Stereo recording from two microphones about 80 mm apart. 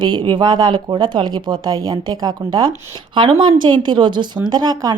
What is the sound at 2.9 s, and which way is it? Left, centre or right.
A woman's voice, right.